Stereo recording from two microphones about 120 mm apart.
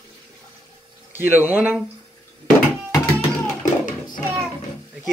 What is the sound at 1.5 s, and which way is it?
Speech, 15° right (ahead or behind).